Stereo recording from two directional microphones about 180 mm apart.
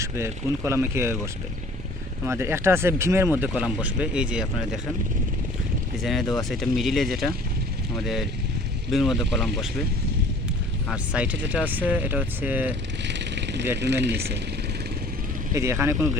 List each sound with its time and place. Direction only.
0.0 s speech: 15° right (ahead or behind)
6.0 s speech: centre (ahead or behind)
10.8 s speech: 5° right (ahead or behind)
13.1 s vehicle: 75° right (ahead or behind)
13.8 s speech: 70° right (ahead or behind)
15.5 s speech: 15° right (ahead or behind)